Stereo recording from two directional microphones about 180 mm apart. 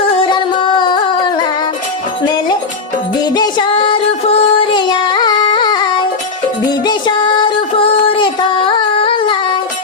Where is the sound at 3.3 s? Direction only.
25° left (ahead or behind).